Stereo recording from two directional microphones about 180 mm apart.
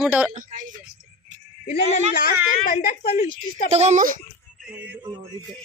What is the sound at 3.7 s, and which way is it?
Speech, 40° right (ahead or behind).